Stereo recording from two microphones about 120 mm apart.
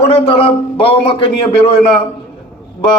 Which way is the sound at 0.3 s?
50° left (ahead or behind).